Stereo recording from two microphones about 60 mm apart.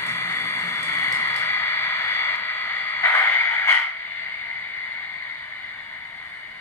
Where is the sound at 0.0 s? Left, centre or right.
Left.